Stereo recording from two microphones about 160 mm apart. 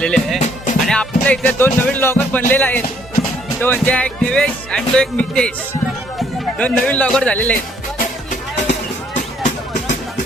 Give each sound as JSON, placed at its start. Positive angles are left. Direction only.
{"t": 0.0, "sound": "music", "side_deg": 5}
{"t": 0.3, "sound": "music", "side_deg": 50}
{"t": 0.9, "sound": "speech", "side_deg": 5}